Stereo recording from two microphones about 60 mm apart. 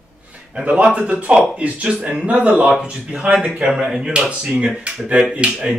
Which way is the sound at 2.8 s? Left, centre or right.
Centre.